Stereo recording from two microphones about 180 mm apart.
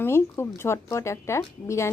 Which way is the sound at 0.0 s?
15° left (ahead or behind).